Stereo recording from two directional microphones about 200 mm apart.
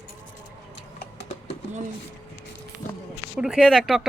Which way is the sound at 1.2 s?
30° left (ahead or behind).